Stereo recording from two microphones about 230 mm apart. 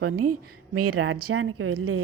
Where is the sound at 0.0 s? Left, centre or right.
Right.